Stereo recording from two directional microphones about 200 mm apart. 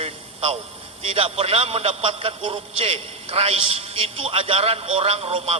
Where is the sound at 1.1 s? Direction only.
30° right (ahead or behind).